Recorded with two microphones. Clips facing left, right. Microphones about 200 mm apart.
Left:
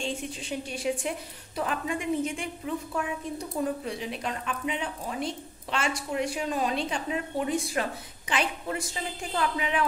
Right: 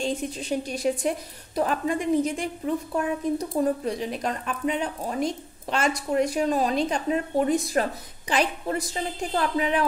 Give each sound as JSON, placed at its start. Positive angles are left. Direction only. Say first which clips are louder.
{"t": 0.0, "sound": "a woman's voice", "louder": "right 5 dB", "side_deg": -40}